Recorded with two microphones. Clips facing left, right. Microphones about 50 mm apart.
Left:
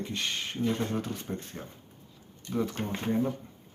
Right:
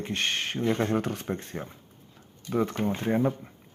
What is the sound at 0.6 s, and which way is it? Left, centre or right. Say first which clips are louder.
Speech: right 4 dB; right.